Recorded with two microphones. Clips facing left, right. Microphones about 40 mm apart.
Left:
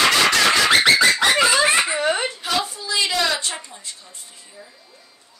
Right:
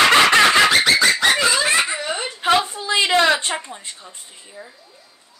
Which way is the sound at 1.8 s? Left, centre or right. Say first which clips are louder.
Left 3 dB; left.